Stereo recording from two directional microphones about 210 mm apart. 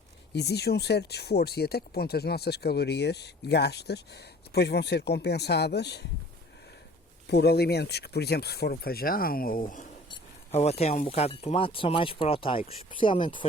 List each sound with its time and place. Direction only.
0.3 s speech: 50° left (ahead or behind)
7.3 s speech: 50° left (ahead or behind); by 13.5 s 25° left (ahead or behind)